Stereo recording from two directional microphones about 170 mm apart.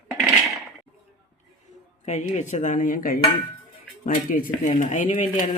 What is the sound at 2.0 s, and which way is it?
Speech, 40° left (ahead or behind).